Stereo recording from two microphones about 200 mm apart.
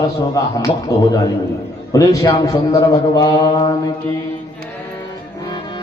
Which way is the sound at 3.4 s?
20° left (ahead or behind).